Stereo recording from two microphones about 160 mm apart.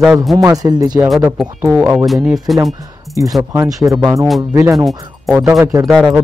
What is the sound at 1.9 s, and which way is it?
Speech, centre (ahead or behind).